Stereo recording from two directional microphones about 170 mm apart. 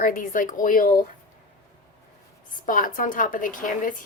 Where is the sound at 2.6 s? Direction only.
55° left (ahead or behind).